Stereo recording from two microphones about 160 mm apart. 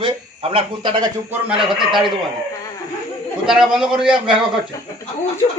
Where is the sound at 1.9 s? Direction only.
Centre (ahead or behind).